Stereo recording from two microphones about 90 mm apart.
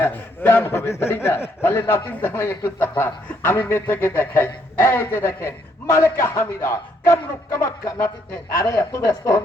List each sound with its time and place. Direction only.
0.0 s a man's voice: 25° left (ahead or behind)